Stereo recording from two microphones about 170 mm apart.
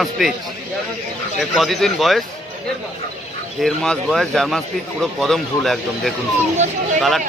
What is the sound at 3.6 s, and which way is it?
Speech, centre (ahead or behind).